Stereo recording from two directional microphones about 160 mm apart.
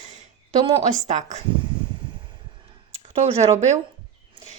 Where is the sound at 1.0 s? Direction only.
45° right (ahead or behind).